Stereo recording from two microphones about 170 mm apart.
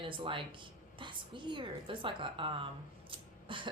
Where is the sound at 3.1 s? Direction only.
30° right (ahead or behind).